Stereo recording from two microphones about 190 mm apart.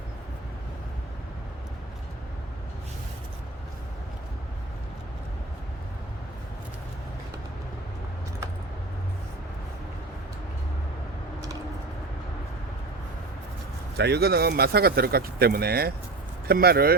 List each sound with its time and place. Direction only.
13.9 s speech: 60° right (ahead or behind)